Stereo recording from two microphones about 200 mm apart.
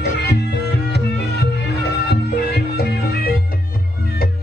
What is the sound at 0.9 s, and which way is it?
Music, 55° left (ahead or behind).